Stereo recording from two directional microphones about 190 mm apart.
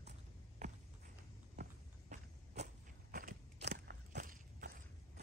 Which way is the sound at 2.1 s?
40° right (ahead or behind).